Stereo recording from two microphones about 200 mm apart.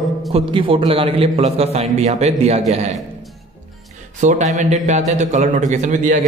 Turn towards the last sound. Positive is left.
turn(degrees=-40)  # may be behind; listen again after turning